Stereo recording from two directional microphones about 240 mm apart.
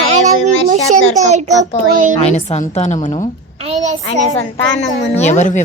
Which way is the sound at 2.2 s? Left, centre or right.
Left.